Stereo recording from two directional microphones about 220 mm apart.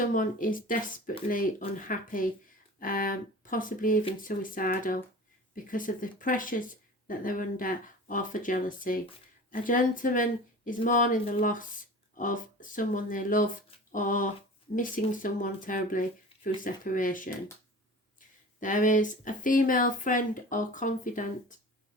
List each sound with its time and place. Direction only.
0.1 s speech: 35° left (ahead or behind)
18.6 s speech: 35° left (ahead or behind)